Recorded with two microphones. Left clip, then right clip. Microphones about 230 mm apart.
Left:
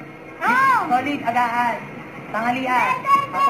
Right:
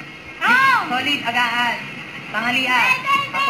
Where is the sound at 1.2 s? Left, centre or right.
Centre.